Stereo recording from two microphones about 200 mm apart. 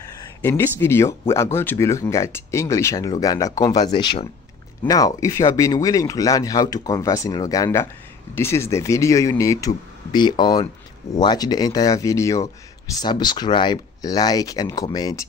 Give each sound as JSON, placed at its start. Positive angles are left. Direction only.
{"t": 0.4, "sound": "speech", "side_deg": 10}